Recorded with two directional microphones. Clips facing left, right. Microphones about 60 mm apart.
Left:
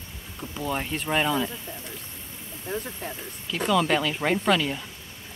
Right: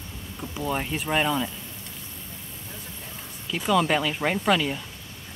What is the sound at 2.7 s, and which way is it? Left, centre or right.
Speech, left.